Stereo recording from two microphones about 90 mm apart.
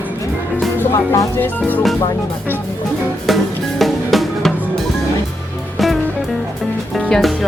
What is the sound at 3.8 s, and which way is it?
Music, centre (ahead or behind).